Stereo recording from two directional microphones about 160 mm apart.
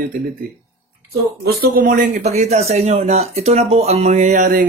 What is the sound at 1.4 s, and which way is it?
A man's voice, 80° right.